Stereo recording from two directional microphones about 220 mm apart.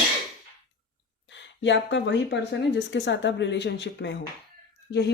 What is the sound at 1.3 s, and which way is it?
Speech, 55° left (ahead or behind).